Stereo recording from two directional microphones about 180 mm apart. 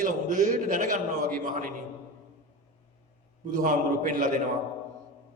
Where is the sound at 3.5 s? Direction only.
45° right (ahead or behind).